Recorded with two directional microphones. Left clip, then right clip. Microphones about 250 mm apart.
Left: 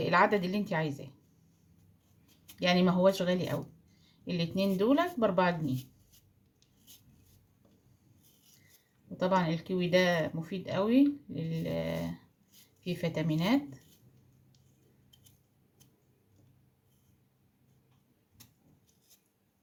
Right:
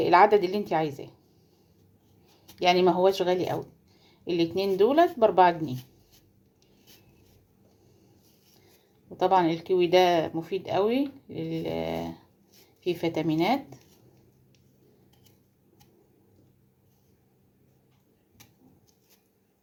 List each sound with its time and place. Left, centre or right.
0.0 s speech: right
2.6 s speech: right
9.1 s speech: right